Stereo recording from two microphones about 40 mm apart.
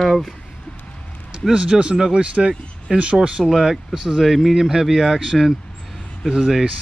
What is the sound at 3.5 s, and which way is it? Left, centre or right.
Speech, centre.